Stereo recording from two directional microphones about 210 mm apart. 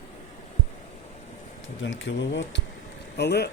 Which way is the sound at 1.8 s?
60° left (ahead or behind).